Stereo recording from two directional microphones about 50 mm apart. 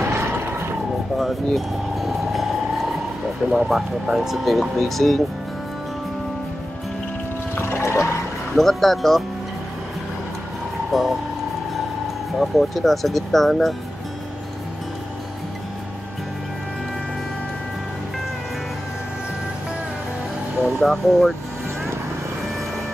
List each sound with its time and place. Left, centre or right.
0.0 s vehicle: right
1.1 s vehicle: centre
3.5 s speech: centre
4.5 s speech: centre
7.5 s music: left
7.8 s music: left
8.5 s speech: centre
10.9 s speech: centre
12.4 s speech: centre
20.8 s speech: centre